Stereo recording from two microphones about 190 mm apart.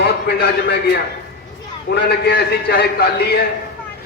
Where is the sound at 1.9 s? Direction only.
60° left (ahead or behind).